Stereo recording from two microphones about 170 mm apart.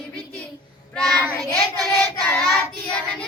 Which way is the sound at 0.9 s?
Centre (ahead or behind).